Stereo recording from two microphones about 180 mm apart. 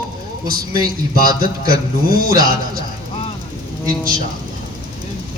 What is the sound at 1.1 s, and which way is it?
A man's voice, 55° right (ahead or behind).